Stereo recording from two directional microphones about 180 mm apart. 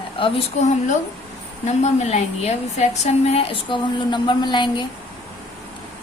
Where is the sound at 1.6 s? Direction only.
40° left (ahead or behind).